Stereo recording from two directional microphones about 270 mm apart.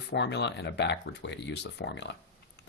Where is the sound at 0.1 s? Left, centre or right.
Left.